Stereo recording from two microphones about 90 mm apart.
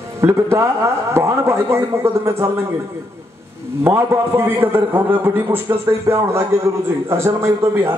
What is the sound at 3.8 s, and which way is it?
A man's voice, 25° right (ahead or behind).